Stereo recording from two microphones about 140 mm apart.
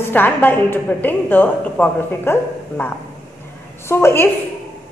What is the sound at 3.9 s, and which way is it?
Speech, 15° left (ahead or behind).